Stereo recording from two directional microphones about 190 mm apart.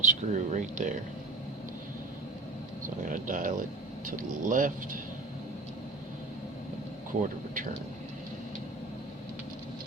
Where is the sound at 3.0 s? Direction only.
45° right (ahead or behind).